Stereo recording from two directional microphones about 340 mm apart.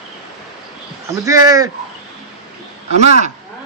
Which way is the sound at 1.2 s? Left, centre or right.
Centre.